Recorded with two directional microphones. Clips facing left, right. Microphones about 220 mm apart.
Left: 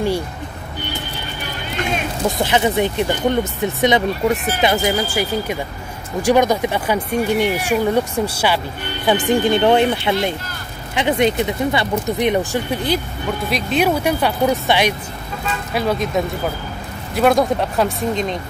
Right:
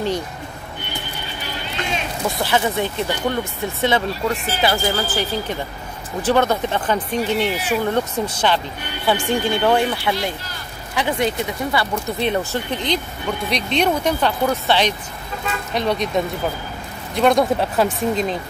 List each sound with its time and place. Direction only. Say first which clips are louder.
2.2 s speech: left 3 dB; 20° left (ahead or behind)
17.1 s speech: left 1 dB; 5° left (ahead or behind)